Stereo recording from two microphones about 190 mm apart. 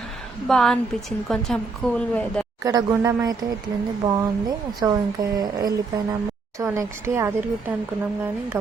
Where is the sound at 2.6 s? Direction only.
20° right (ahead or behind).